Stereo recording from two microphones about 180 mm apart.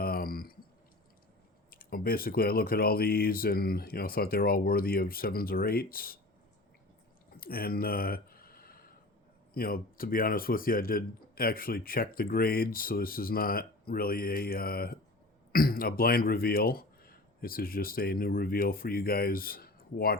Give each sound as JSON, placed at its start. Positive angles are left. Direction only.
{"t": 0.0, "sound": "clicking", "side_deg": 55}
{"t": 1.7, "sound": "speech", "side_deg": 55}
{"t": 7.3, "sound": "a sound", "side_deg": 55}
{"t": 9.6, "sound": "speech", "side_deg": 55}